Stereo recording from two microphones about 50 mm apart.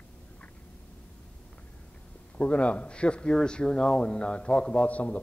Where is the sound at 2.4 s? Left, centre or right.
Left.